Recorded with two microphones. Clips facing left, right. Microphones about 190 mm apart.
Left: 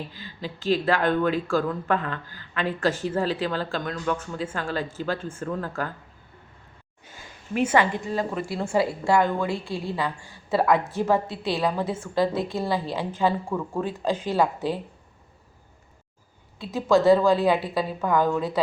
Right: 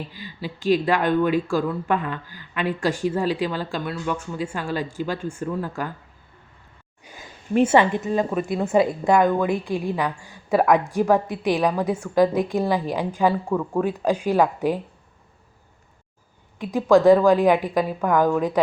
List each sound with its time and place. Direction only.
0.1 s speech: 10° right (ahead or behind)
7.0 s a sound: 15° right (ahead or behind)
7.5 s a woman's voice: 30° right (ahead or behind); by 14.8 s 15° right (ahead or behind)
16.6 s speech: 15° right (ahead or behind)